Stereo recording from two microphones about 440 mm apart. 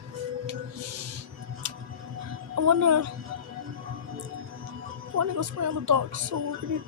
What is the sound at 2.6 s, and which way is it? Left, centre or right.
Speech, right.